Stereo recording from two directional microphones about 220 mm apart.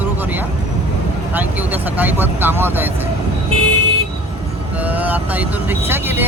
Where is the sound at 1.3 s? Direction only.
5° right (ahead or behind).